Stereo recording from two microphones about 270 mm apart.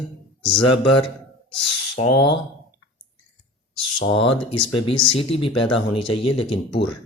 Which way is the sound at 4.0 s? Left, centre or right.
Left.